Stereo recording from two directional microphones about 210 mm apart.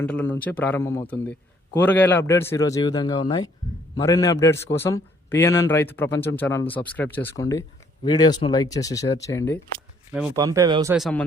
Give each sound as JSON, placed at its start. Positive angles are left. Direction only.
{"t": 0.0, "sound": "a man's voice", "side_deg": 5}
{"t": 10.1, "sound": "speech", "side_deg": -5}
{"t": 10.3, "sound": "speech", "side_deg": -15}
{"t": 10.9, "sound": "speech", "side_deg": 0}